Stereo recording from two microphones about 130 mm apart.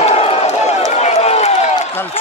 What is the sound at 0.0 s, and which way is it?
Run, 50° left (ahead or behind).